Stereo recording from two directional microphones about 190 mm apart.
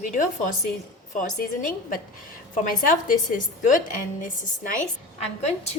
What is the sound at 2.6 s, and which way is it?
A woman's voice, 45° left (ahead or behind).